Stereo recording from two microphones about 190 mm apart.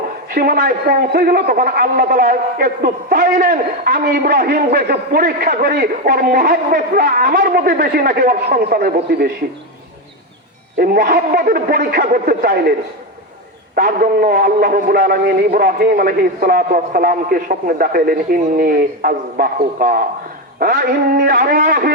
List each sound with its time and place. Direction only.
0.3 s a man's voice: 50° right (ahead or behind)
10.8 s a man's voice: 50° right (ahead or behind)
13.7 s a man's voice: 45° right (ahead or behind)